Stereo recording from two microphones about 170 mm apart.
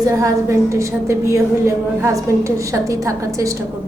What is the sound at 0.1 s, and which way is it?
A woman's voice, 20° right (ahead or behind).